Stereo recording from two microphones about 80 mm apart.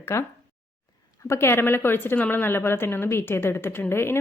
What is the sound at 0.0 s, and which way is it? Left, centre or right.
A woman's voice, left.